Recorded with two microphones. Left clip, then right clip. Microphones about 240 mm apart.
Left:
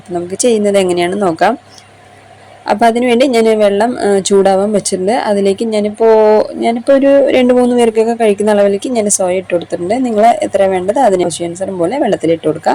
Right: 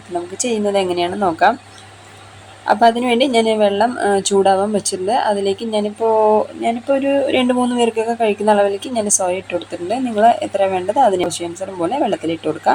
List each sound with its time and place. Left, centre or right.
0.3 s speech: left
2.6 s speech: left